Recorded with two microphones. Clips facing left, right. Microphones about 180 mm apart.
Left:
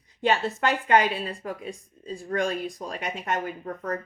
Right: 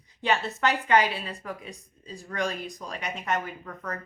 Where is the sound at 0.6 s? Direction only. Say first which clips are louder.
Left 1 dB; 45° left (ahead or behind).